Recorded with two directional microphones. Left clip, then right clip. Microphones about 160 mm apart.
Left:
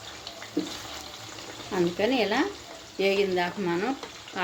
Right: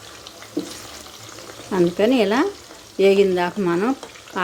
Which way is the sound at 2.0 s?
70° right (ahead or behind).